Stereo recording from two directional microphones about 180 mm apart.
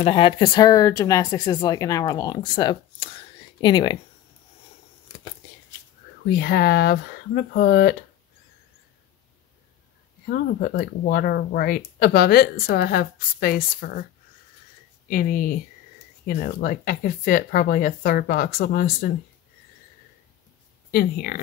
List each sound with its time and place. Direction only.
0.0 s speech: 30° left (ahead or behind)
6.2 s speech: 60° left (ahead or behind)
10.2 s speech: 55° left (ahead or behind)
15.0 s speech: 50° left (ahead or behind)
20.9 s speech: 60° left (ahead or behind)